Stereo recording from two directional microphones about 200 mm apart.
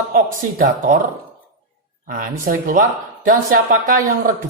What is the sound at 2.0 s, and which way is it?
Speech, 45° right (ahead or behind).